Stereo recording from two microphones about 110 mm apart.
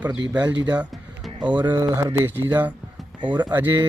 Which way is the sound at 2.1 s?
20° right (ahead or behind).